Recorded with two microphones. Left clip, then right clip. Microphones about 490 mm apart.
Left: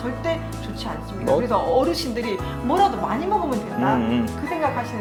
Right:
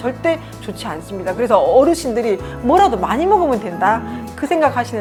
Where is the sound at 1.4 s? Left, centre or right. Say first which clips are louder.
Right 8 dB; right.